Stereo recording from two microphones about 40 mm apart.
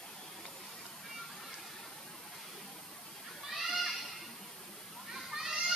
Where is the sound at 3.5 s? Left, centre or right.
Centre.